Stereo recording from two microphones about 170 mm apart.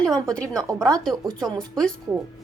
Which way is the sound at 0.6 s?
20° right (ahead or behind).